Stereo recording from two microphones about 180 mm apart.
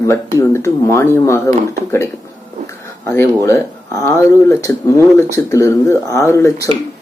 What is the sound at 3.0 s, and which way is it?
Speech, 15° left (ahead or behind).